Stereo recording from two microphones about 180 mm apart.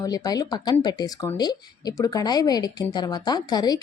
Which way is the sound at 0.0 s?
20° left (ahead or behind).